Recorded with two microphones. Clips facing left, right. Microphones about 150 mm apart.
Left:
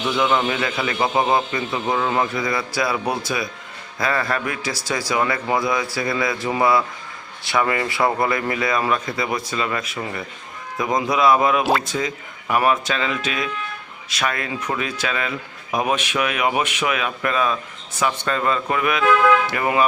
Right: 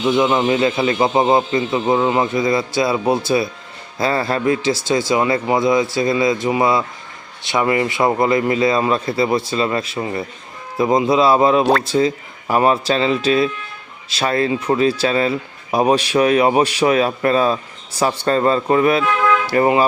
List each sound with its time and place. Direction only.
0.1 s a man's voice: 20° right (ahead or behind)